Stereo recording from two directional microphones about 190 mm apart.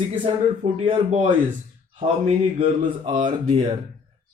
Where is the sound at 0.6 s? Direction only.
30° right (ahead or behind).